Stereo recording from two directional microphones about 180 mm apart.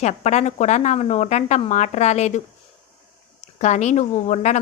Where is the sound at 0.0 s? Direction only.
40° left (ahead or behind).